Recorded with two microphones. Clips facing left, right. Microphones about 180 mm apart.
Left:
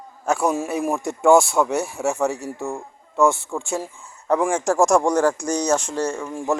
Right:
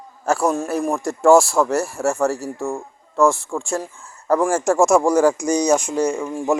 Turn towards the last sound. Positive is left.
turn(degrees=-10)  # may be behind; listen again after turning